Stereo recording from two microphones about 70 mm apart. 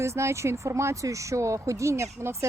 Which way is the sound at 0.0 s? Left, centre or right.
Right.